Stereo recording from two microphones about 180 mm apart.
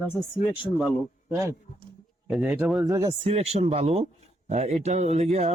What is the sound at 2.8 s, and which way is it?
Speech, 20° right (ahead or behind).